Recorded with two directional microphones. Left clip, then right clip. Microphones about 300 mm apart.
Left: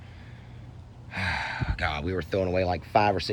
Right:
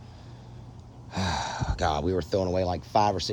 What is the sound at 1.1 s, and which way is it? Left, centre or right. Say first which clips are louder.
Speech: left 1 dB; centre.